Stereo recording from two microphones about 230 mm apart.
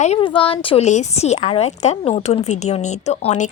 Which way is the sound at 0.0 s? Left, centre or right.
Left.